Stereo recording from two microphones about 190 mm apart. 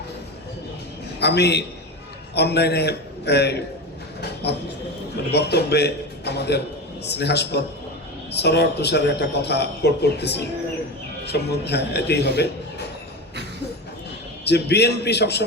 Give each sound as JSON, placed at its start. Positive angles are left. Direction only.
{"t": 1.2, "sound": "a man's voice", "side_deg": 60}
{"t": 14.4, "sound": "a man's voice", "side_deg": 60}